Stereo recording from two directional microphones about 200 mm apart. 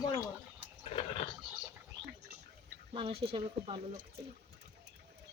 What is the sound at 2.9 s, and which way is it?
Speech, 25° right (ahead or behind).